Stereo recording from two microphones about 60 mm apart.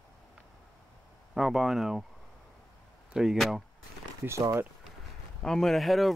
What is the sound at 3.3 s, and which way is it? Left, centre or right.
Speech, centre.